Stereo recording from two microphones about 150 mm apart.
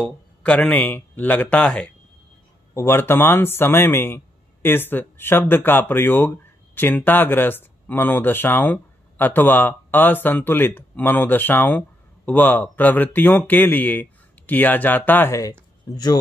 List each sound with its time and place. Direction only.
0.0 s speech: 10° left (ahead or behind); by 16.2 s 25° left (ahead or behind)